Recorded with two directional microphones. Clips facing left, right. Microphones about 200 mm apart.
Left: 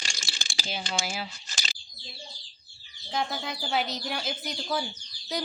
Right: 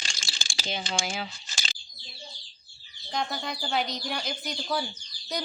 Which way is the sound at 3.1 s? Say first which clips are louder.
Even; 5° left (ahead or behind).